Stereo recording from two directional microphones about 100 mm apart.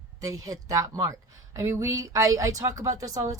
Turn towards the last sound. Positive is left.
turn(degrees=-35)  # may be behind; listen again after turning